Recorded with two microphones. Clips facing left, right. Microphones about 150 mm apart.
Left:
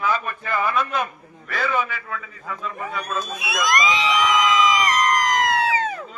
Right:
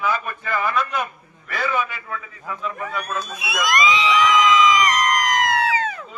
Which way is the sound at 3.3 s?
20° left (ahead or behind).